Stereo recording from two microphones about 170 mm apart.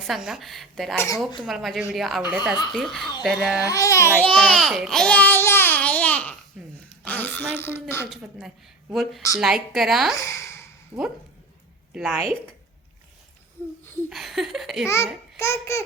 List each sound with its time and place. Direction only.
0.1 s speech: centre (ahead or behind)
0.9 s speech: 20° left (ahead or behind)
1.5 s speech: centre (ahead or behind)
3.7 s speech: 20° left (ahead or behind)
4.4 s speech: centre (ahead or behind)
8.1 s speech: centre (ahead or behind)
10.2 s a sound: 15° left (ahead or behind)
11.9 s speech: centre (ahead or behind)
14.1 s speech: centre (ahead or behind)
14.8 s speech: 15° left (ahead or behind)